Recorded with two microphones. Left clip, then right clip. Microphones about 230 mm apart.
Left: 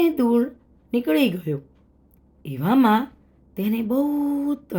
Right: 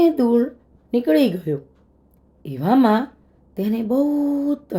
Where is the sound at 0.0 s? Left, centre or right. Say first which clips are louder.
Right 3 dB; left.